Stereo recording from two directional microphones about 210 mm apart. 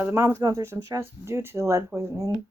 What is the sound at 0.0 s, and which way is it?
Speech, 10° right (ahead or behind).